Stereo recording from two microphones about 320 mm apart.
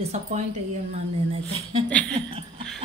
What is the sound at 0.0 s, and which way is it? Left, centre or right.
A woman's voice, centre.